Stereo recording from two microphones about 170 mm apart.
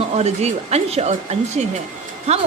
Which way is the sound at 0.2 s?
40° right (ahead or behind).